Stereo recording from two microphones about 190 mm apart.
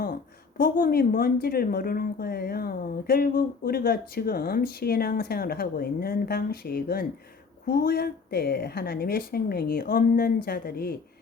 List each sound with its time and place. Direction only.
0.0 s a woman's voice: 50° left (ahead or behind)